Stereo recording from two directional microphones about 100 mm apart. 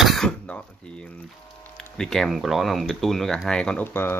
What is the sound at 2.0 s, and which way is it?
Speech, 5° left (ahead or behind).